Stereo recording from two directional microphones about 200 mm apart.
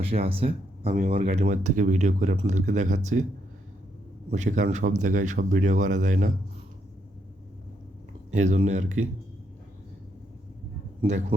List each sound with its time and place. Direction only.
0.0 s speech: 30° right (ahead or behind)
4.3 s speech: 35° right (ahead or behind)
8.3 s speech: 35° right (ahead or behind)
11.0 s speech: 35° right (ahead or behind)